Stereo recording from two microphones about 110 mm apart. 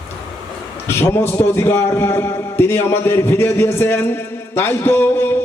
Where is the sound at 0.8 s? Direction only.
20° left (ahead or behind).